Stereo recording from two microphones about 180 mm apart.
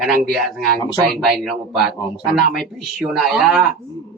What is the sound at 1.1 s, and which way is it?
Speech, centre (ahead or behind).